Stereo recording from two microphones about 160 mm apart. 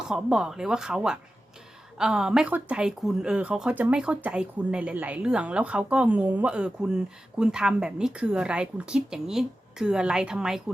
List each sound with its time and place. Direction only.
0.0 s speech: 5° right (ahead or behind)